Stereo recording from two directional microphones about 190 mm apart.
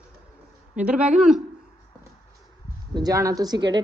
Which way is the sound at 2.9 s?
20° right (ahead or behind).